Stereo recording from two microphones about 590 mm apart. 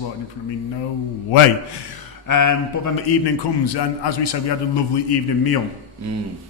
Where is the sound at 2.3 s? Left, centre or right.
Left.